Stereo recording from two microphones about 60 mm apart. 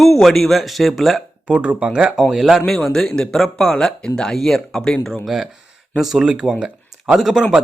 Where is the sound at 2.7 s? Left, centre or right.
Centre.